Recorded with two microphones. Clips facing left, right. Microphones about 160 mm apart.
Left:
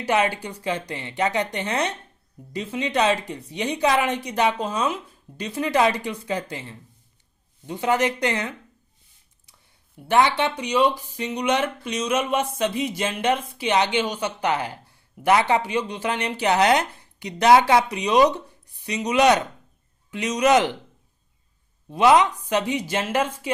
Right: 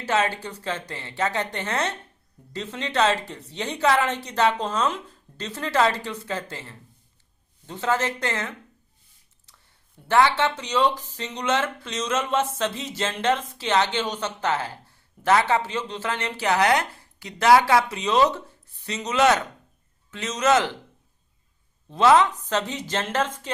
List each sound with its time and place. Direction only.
0.0 s speech: 15° left (ahead or behind)
10.1 s speech: 15° left (ahead or behind)
21.8 s speech: 15° left (ahead or behind)